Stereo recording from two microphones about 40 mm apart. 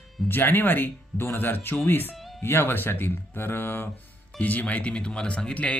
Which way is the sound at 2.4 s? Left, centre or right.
Left.